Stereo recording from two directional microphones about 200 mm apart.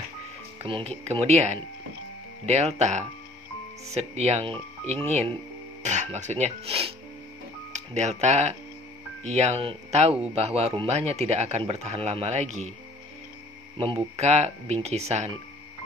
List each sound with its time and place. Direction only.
0.6 s speech: 30° right (ahead or behind)
13.7 s speech: 30° right (ahead or behind)